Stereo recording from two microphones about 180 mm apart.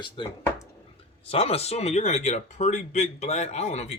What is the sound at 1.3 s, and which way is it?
A man's voice, 35° left (ahead or behind).